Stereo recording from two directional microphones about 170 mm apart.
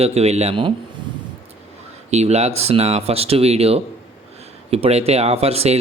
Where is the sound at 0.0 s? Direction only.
40° right (ahead or behind).